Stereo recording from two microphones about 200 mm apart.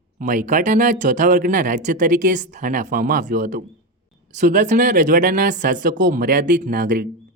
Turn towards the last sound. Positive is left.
turn(degrees=-40)  # may be behind; listen again after turning